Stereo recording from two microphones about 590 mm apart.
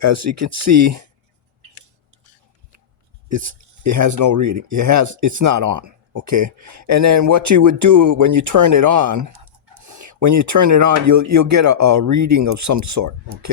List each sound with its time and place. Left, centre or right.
0.0 s speech: right
3.2 s speech: right